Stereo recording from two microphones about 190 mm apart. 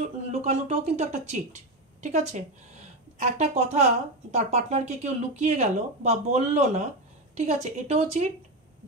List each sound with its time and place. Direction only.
0.0 s speech: 35° right (ahead or behind)